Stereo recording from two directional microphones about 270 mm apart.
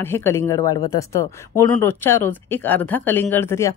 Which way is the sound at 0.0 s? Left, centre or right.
Centre.